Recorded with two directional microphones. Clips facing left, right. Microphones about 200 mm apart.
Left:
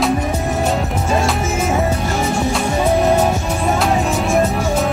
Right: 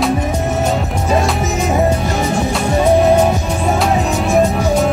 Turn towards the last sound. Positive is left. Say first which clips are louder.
# right 1 dB
turn(degrees=0)  # may be behind; listen again after turning